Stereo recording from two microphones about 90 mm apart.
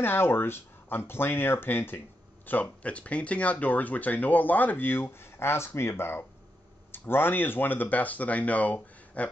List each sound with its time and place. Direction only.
0.0 s speech: 25° left (ahead or behind)